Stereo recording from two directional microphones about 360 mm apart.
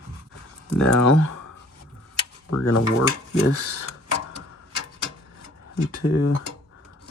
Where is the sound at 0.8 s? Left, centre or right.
Left.